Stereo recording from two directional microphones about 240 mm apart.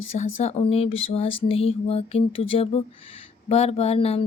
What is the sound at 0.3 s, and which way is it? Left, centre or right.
Speech, left.